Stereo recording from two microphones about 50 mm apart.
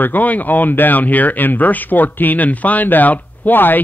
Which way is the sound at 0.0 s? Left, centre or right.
Left.